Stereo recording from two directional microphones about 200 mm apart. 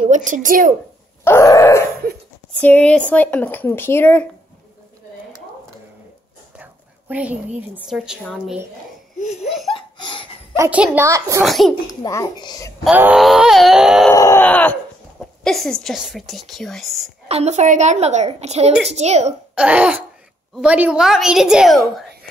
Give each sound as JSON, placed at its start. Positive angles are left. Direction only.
{"t": 0.0, "sound": "a child's voice", "side_deg": -40}
{"t": 1.2, "sound": "groan", "side_deg": 15}
{"t": 2.6, "sound": "speech", "side_deg": 5}
{"t": 6.6, "sound": "a woman's voice", "side_deg": -5}
{"t": 9.2, "sound": "laughter", "side_deg": 35}
{"t": 9.7, "sound": "laughter", "side_deg": 25}
{"t": 10.5, "sound": "speech", "side_deg": -10}
{"t": 11.4, "sound": "a woman's voice", "side_deg": 0}
{"t": 12.0, "sound": "speech", "side_deg": 20}
{"t": 12.8, "sound": "a woman's voice", "side_deg": -5}
{"t": 14.1, "sound": "a woman's voice", "side_deg": 15}
{"t": 17.3, "sound": "a woman's voice", "side_deg": -35}
{"t": 19.5, "sound": "a woman's voice", "side_deg": -5}